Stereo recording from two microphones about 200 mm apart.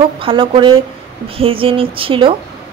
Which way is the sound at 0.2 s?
25° right (ahead or behind).